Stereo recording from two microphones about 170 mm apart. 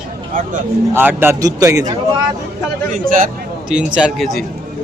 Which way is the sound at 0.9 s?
10° right (ahead or behind).